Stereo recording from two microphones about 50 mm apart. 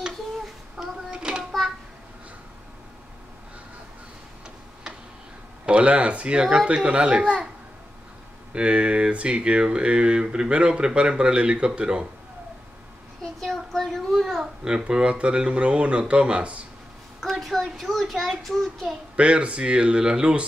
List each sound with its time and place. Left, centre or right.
0.7 s a sound: centre
5.7 s speech: right
8.5 s speech: right
13.2 s a sound: centre
14.4 s speech: centre
17.2 s a child's voice: centre
19.1 s speech: right